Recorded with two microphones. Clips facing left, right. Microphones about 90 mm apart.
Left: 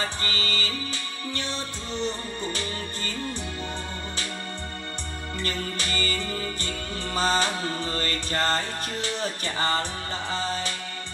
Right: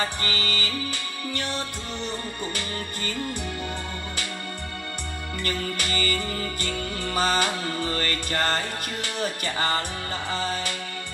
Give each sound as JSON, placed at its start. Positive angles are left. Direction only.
{"t": 0.2, "sound": "music", "side_deg": 30}
{"t": 5.4, "sound": "music", "side_deg": 30}